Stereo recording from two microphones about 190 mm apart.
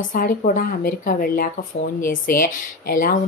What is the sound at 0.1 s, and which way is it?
Speech, 45° left (ahead or behind).